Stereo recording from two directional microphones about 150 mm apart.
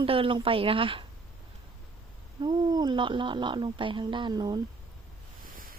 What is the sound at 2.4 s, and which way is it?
A woman's voice, 30° right (ahead or behind).